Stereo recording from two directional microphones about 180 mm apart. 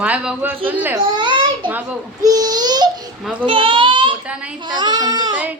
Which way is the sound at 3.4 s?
30° right (ahead or behind).